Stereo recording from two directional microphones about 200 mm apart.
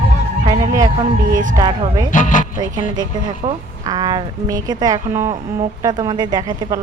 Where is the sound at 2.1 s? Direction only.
40° left (ahead or behind).